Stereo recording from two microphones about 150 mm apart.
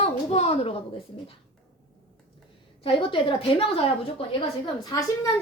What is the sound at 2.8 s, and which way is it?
Speech, 35° left (ahead or behind).